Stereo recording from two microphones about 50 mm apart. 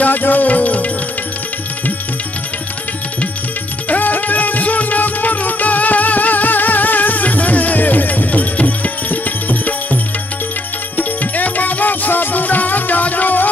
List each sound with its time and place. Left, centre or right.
0.0 s music: left
3.9 s music: left
11.0 s music: left